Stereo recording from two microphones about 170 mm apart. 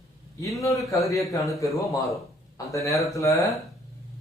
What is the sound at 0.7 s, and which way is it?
Speech, 20° left (ahead or behind).